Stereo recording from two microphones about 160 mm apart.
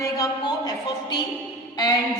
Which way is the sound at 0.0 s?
25° left (ahead or behind).